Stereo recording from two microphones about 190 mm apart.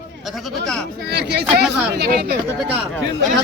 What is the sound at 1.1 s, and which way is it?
Speech, 60° right (ahead or behind).